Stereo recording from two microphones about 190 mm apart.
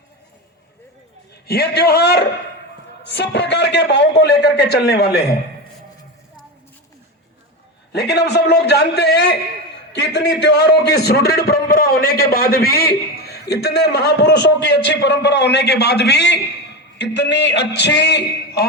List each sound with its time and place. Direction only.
1.5 s a man's voice: 55° left (ahead or behind)
7.9 s a man's voice: 60° left (ahead or behind)